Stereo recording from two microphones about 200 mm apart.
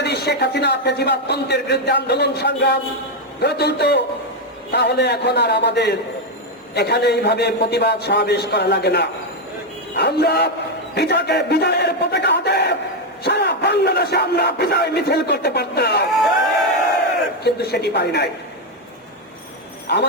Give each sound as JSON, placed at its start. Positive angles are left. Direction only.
{"t": 0.0, "sound": "crowd", "side_deg": 55}
{"t": 17.4, "sound": "crowd", "side_deg": 55}